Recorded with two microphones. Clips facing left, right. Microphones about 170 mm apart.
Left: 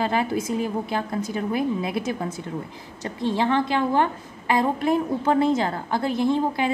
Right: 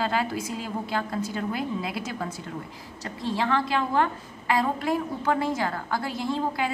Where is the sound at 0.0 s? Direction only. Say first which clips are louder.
Left 4 dB; 20° left (ahead or behind).